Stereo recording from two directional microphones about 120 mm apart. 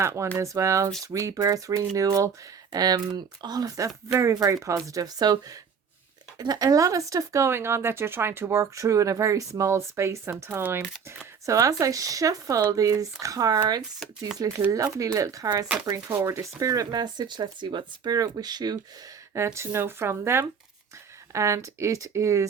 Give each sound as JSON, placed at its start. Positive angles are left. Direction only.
{"t": 0.0, "sound": "speech", "side_deg": -25}
{"t": 19.3, "sound": "speech", "side_deg": -25}